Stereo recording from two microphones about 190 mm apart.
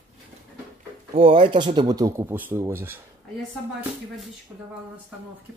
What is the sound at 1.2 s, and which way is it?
Speech, 25° right (ahead or behind).